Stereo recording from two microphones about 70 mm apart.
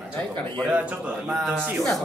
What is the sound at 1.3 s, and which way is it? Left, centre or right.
Speech, centre.